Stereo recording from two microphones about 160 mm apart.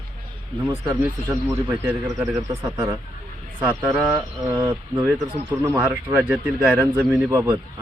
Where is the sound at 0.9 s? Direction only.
15° right (ahead or behind).